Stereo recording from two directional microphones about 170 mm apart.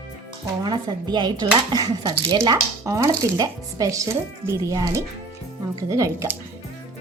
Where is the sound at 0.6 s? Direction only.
25° right (ahead or behind).